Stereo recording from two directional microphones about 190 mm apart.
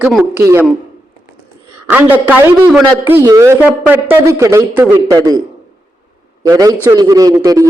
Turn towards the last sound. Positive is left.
turn(degrees=-20)  # may be behind; listen again after turning